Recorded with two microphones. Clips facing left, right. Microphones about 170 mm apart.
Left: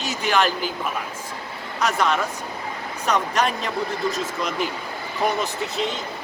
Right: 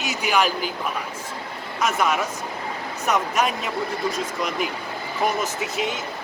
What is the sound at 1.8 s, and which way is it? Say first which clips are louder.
Speech: even; centre (ahead or behind).